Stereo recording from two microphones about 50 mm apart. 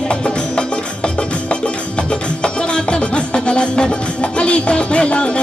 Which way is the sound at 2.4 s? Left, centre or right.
Centre.